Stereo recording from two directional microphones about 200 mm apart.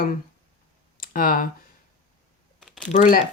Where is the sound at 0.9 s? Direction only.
45° left (ahead or behind).